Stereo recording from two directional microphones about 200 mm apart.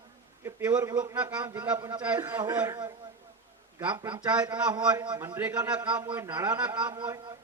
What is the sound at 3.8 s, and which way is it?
Speech, 5° right (ahead or behind).